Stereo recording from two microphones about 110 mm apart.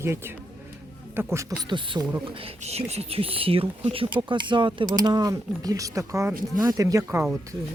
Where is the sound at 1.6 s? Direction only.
45° right (ahead or behind).